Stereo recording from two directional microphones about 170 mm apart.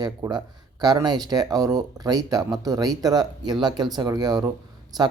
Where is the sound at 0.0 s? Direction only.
25° right (ahead or behind).